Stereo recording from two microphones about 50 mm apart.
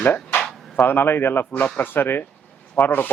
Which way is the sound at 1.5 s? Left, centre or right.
Left.